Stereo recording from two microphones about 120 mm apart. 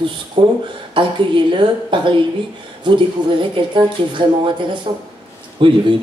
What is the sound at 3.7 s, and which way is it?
Speech, 40° right (ahead or behind).